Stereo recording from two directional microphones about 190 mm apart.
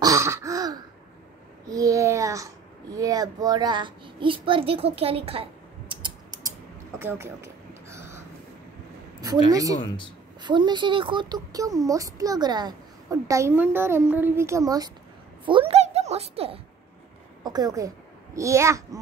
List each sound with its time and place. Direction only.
0.0 s throat clearing: 15° right (ahead or behind)
1.7 s a sound: 15° right (ahead or behind)
9.2 s a woman's voice: 20° right (ahead or behind)
17.4 s a child's voice: 20° right (ahead or behind)